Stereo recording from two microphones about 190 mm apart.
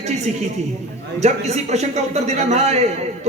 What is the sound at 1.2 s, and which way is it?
A man's voice, 35° right (ahead or behind).